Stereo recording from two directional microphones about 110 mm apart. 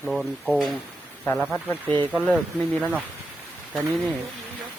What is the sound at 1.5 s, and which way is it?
Speech, 15° left (ahead or behind).